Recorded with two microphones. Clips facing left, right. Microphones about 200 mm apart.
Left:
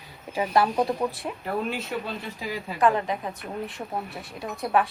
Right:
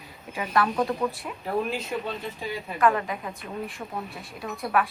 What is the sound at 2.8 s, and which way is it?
Speech, 30° left (ahead or behind).